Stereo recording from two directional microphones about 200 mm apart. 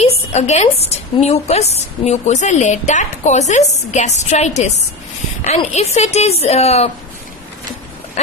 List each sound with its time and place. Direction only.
0.0 s a woman's voice: 35° left (ahead or behind)